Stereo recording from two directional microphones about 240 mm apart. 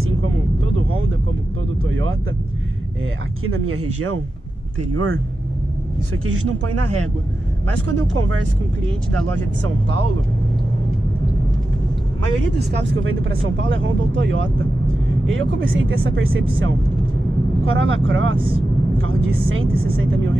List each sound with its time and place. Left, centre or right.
1.9 s vehicle: right
3.4 s speech: right
6.2 s speech: right
12.5 s speech: right